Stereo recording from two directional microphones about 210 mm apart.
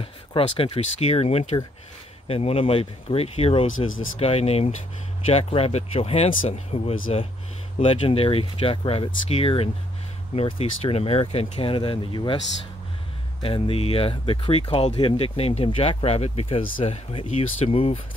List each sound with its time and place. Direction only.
0.0 s speech: 25° left (ahead or behind)
3.9 s speech: 70° left (ahead or behind)
4.2 s speech: 30° left (ahead or behind)
13.4 s speech: 25° left (ahead or behind)